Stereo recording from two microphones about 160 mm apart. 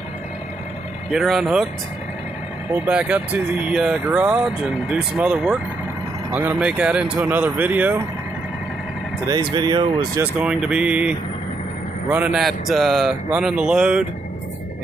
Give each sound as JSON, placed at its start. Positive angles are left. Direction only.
{"t": 1.1, "sound": "speech", "side_deg": -5}
{"t": 2.7, "sound": "speech", "side_deg": -10}
{"t": 6.6, "sound": "speech", "side_deg": -5}
{"t": 9.3, "sound": "speech", "side_deg": -30}
{"t": 10.2, "sound": "speech", "side_deg": -10}